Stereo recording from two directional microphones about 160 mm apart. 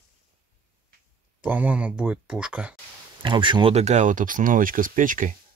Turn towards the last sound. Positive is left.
turn(degrees=-55)  # may be behind; listen again after turning